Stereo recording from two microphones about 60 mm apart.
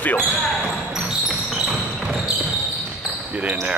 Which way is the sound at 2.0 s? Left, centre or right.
Centre.